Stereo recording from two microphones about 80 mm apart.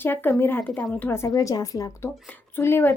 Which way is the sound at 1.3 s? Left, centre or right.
Left.